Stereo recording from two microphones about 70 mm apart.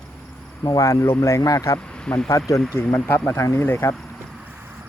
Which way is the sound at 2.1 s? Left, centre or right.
Centre.